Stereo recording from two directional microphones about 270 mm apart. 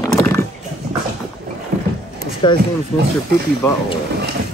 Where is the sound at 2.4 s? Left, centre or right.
Centre.